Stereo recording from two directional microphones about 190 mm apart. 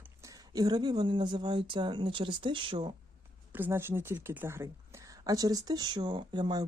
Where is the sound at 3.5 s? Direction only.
10° right (ahead or behind).